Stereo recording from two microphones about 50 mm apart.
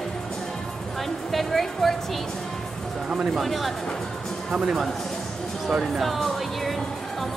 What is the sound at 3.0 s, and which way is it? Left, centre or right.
Speech, centre.